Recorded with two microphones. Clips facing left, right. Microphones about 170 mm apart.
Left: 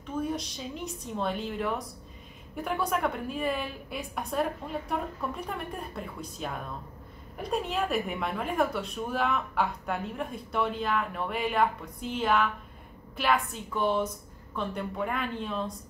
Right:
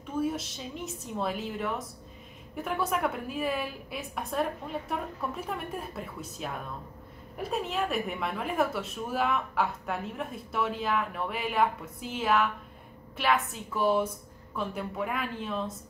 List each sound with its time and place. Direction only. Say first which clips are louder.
0.2 s a woman's voice: right 2 dB; 5° right (ahead or behind)